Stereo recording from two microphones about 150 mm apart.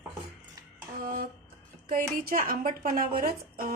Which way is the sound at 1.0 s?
70° right (ahead or behind).